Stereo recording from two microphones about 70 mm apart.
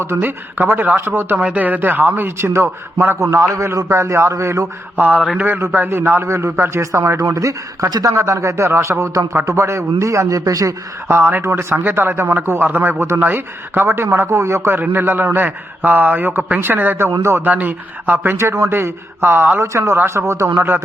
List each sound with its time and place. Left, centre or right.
0.0 s speech: right
1.4 s speech: right
4.9 s speech: right
6.2 s speech: right
7.9 s a man's voice: right
8.1 s speech: right
11.1 s speech: right
17.1 s speech: right
17.4 s speech: right
19.6 s speech: right